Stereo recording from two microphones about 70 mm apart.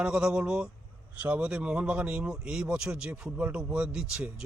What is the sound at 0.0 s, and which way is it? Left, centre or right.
Speech, centre.